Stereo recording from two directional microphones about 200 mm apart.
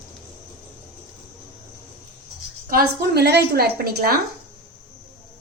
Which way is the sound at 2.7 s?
50° right (ahead or behind).